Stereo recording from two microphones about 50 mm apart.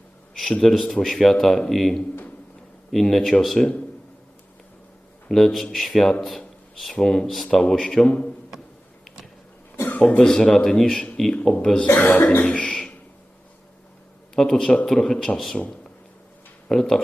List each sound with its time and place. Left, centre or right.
0.6 s speech: centre
5.3 s speech: centre
8.0 s a man's voice: left
9.7 s cough: left
10.2 s speech: centre
11.9 s speech: left
12.5 s a sound: centre
14.3 s speech: centre
15.5 s speech: left
16.6 s speech: centre